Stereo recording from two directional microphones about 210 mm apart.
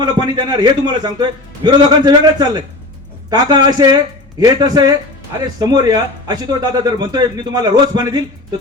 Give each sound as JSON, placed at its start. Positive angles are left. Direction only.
{"t": 0.0, "sound": "a man's voice", "side_deg": -20}